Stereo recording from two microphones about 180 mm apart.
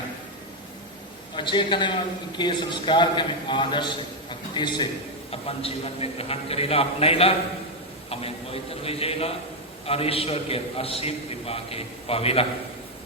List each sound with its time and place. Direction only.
1.4 s a man's voice: 25° left (ahead or behind)